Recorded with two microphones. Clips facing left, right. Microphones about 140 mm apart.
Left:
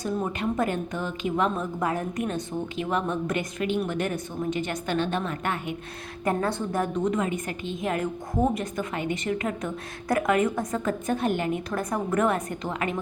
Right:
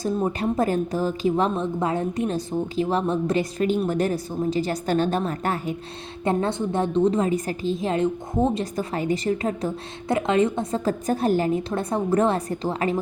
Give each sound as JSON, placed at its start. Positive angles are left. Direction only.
{"t": 0.0, "sound": "a woman's voice", "side_deg": -35}
{"t": 6.2, "sound": "a woman's voice", "side_deg": -25}
{"t": 8.7, "sound": "a woman's voice", "side_deg": -35}